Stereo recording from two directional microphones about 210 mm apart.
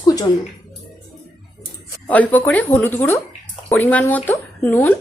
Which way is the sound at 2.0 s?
10° left (ahead or behind).